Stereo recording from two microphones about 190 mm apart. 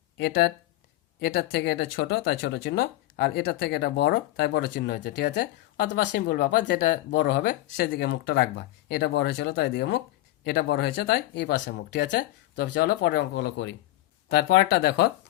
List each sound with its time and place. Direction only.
0.2 s speech: 60° left (ahead or behind)